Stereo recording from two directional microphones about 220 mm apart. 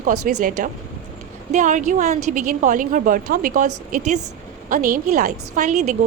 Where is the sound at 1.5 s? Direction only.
35° right (ahead or behind).